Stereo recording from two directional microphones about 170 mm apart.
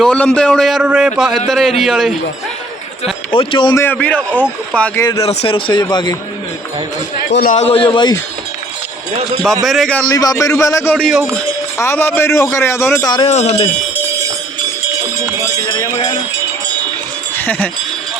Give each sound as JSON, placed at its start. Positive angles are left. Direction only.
{"t": 0.0, "sound": "a man's voice", "side_deg": 5}
{"t": 3.0, "sound": "speech", "side_deg": 30}
{"t": 3.8, "sound": "a man's voice", "side_deg": 10}
{"t": 5.2, "sound": "a man's voice", "side_deg": 35}
{"t": 7.3, "sound": "a man's voice", "side_deg": 70}
{"t": 7.5, "sound": "a man's voice", "side_deg": 35}
{"t": 9.6, "sound": "a man's voice", "side_deg": 0}
{"t": 10.1, "sound": "a man's voice", "side_deg": 20}
{"t": 10.9, "sound": "a man's voice", "side_deg": 0}
{"t": 11.8, "sound": "a man's voice", "side_deg": 15}
{"t": 13.2, "sound": "speech", "side_deg": 40}
{"t": 15.4, "sound": "a sound", "side_deg": 20}
{"t": 17.3, "sound": "wind chime", "side_deg": 10}